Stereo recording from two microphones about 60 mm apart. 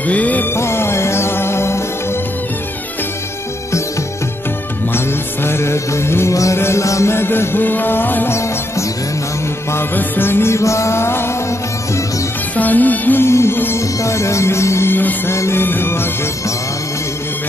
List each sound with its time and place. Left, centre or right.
0.0 s music: left
0.5 s music: left
4.9 s music: left
6.3 s music: left
9.9 s music: left
12.5 s music: left
13.2 s music: left
14.9 s music: left
15.3 s music: left